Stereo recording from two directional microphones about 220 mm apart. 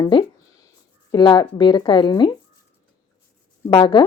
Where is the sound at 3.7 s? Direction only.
20° left (ahead or behind).